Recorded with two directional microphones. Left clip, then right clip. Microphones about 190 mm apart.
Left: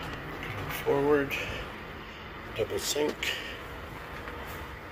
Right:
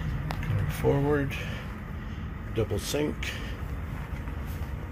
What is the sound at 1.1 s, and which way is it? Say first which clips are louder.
Speech: left 2 dB; 5° left (ahead or behind).